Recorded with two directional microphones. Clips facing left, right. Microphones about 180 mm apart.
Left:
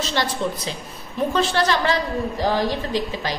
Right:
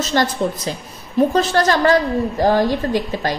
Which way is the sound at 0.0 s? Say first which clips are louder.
Right 5 dB; 45° right (ahead or behind).